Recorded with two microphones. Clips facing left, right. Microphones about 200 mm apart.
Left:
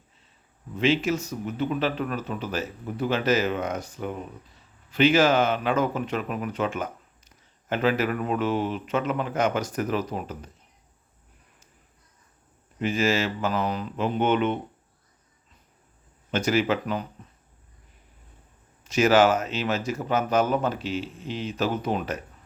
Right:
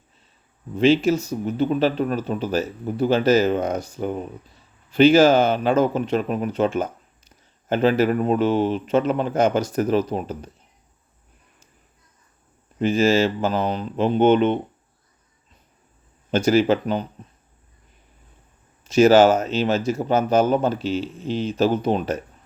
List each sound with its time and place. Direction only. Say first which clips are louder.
0.8 s speech: right 6 dB; 30° right (ahead or behind)
12.8 s speech: right 6 dB; 30° right (ahead or behind)
16.3 s speech: right 6 dB; 30° right (ahead or behind)
18.9 s speech: right 6 dB; 30° right (ahead or behind)